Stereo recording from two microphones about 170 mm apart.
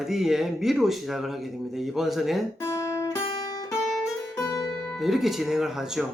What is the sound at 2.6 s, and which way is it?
Guitar, 15° left (ahead or behind).